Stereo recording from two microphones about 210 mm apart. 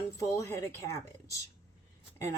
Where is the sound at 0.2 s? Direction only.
15° left (ahead or behind).